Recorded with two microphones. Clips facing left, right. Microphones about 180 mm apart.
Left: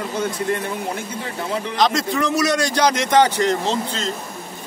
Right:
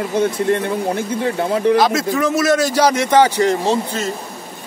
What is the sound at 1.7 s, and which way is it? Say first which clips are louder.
A man's voice: right 4 dB; 5° right (ahead or behind).